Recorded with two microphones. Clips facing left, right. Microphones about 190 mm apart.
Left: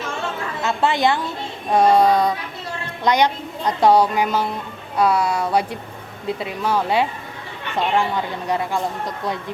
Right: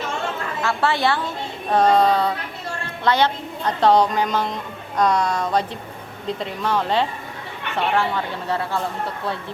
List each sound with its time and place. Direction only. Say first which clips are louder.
0.6 s speech: left 2 dB; 20° left (ahead or behind)